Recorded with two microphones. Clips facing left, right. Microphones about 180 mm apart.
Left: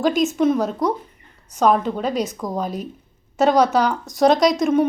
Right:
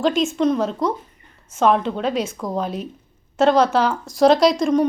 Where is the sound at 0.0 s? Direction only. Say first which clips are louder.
Left 1 dB; centre (ahead or behind).